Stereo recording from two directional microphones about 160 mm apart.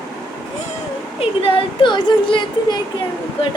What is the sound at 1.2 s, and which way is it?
Speech, 35° left (ahead or behind).